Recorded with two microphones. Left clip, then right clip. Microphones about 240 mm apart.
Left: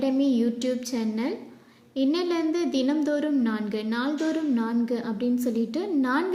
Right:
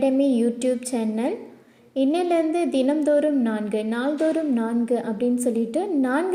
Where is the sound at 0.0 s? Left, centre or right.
Centre.